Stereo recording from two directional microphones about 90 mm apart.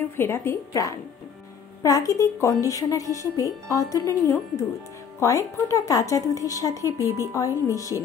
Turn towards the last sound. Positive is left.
turn(degrees=40)  # may be behind; listen again after turning